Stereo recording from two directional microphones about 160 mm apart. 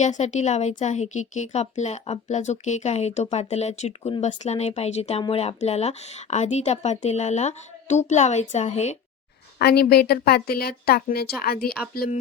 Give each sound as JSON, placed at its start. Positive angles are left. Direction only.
{"t": 0.0, "sound": "a woman's voice", "side_deg": 45}
{"t": 9.6, "sound": "a woman's voice", "side_deg": 80}